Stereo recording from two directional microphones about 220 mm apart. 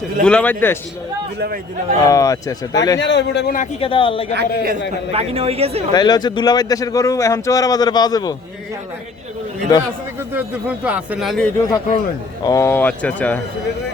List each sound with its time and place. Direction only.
0.3 s speech: 5° left (ahead or behind)
1.4 s a man's voice: 45° right (ahead or behind)
2.0 s speech: 15° left (ahead or behind)
3.0 s a man's voice: 50° left (ahead or behind)
3.8 s speech: 25° left (ahead or behind)
4.4 s a man's voice: 40° right (ahead or behind)
5.1 s speech: 25° right (ahead or behind)
5.9 s speech: 20° left (ahead or behind)
10.8 s speech: 5° right (ahead or behind)
11.5 s speech: 15° left (ahead or behind)